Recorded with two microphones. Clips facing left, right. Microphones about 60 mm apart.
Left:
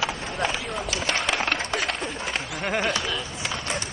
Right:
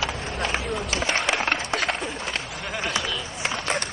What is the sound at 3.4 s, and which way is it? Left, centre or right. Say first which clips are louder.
Skateboard: right 4 dB; right.